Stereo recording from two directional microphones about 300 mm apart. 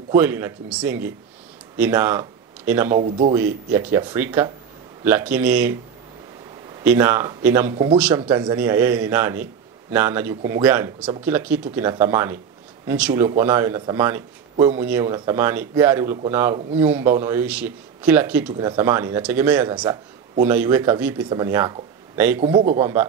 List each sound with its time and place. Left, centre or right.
0.1 s a man's voice: centre
3.0 s speech: right
3.3 s a man's voice: centre
6.8 s a man's voice: centre
7.7 s a man's voice: centre